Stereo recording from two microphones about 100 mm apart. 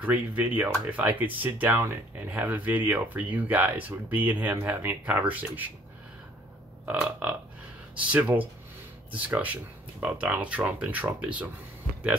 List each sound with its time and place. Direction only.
0.0 s speech: 15° right (ahead or behind)
6.9 s speech: 15° right (ahead or behind)